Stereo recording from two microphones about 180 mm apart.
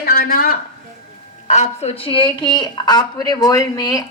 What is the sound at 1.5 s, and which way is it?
A woman's voice, 35° left (ahead or behind).